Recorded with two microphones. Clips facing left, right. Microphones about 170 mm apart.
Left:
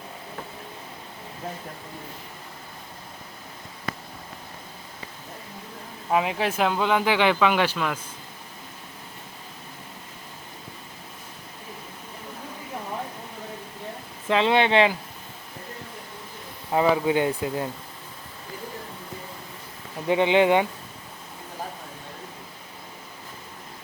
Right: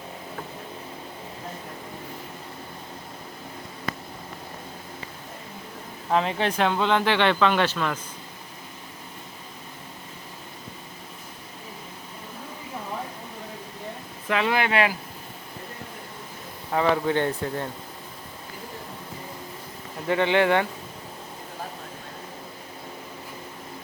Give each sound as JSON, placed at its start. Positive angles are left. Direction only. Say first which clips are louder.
{"t": 6.1, "sound": "speech", "louder": "even", "side_deg": 5}
{"t": 14.3, "sound": "speech", "louder": "left 3 dB", "side_deg": 25}
{"t": 16.7, "sound": "speech", "louder": "left 2 dB", "side_deg": 10}
{"t": 20.1, "sound": "speech", "louder": "left 2 dB", "side_deg": 15}